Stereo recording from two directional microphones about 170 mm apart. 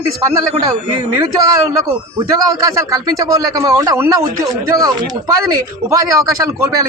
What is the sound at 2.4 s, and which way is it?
Speech, 20° right (ahead or behind).